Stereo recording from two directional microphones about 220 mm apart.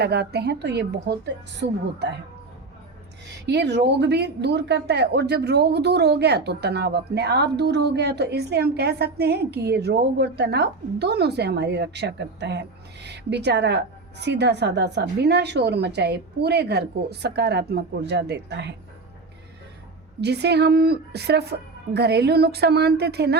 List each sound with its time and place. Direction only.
0.0 s speech: 50° right (ahead or behind)
3.4 s speech: 50° right (ahead or behind)
20.2 s speech: 50° right (ahead or behind)